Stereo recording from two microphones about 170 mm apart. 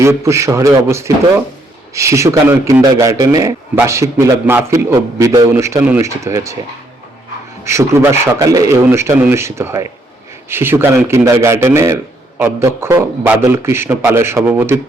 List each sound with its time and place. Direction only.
0.0 s a man's voice: 15° right (ahead or behind)
7.6 s a man's voice: 15° right (ahead or behind)